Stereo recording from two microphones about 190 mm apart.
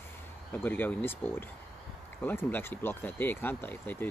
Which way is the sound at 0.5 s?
10° left (ahead or behind).